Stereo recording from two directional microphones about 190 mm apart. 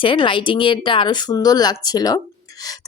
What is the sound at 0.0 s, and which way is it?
Speech, 25° left (ahead or behind).